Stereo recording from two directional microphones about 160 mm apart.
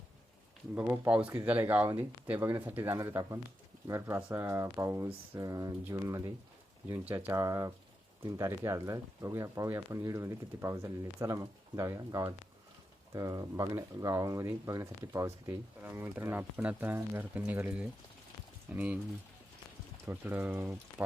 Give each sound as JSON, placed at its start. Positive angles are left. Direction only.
{"t": 0.8, "sound": "speech", "side_deg": -10}
{"t": 20.1, "sound": "speech", "side_deg": -10}